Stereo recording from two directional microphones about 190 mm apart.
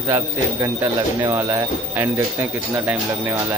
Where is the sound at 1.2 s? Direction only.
15° right (ahead or behind).